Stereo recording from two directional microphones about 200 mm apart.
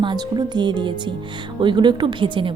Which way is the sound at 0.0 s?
20° right (ahead or behind).